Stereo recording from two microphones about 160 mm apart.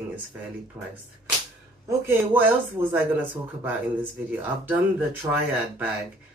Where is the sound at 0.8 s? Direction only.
15° right (ahead or behind).